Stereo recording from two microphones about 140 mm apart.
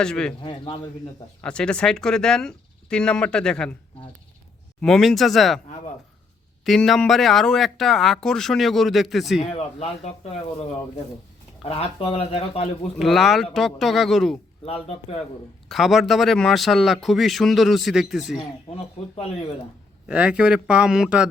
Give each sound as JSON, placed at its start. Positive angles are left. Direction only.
{"t": 0.0, "sound": "speech", "side_deg": 5}
{"t": 0.4, "sound": "speech", "side_deg": 35}
{"t": 1.4, "sound": "speech", "side_deg": 5}
{"t": 4.8, "sound": "speech", "side_deg": 0}
{"t": 6.7, "sound": "speech", "side_deg": 0}
{"t": 9.5, "sound": "speech", "side_deg": 50}
{"t": 11.7, "sound": "speech", "side_deg": 45}
{"t": 13.0, "sound": "speech", "side_deg": 0}
{"t": 14.6, "sound": "speech", "side_deg": 45}
{"t": 15.7, "sound": "speech", "side_deg": 0}
{"t": 18.3, "sound": "speech", "side_deg": 45}
{"t": 20.1, "sound": "speech", "side_deg": -5}